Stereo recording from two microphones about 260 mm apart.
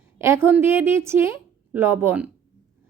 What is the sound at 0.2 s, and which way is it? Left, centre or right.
A woman's voice, centre.